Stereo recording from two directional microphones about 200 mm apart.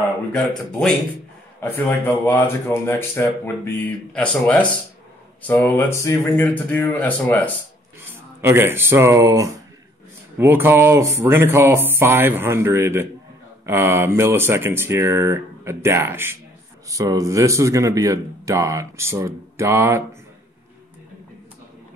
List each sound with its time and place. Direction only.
1.6 s speech: 10° left (ahead or behind)
8.4 s speech: 10° right (ahead or behind)